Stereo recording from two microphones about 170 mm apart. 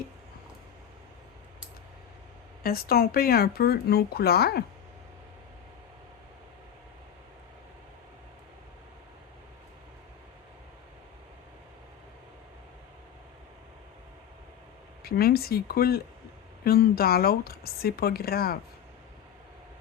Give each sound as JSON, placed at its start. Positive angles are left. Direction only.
{"t": 2.6, "sound": "speech", "side_deg": 65}
{"t": 15.0, "sound": "speech", "side_deg": 65}